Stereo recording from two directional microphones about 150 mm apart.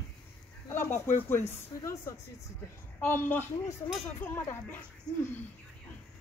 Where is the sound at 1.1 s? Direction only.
15° left (ahead or behind).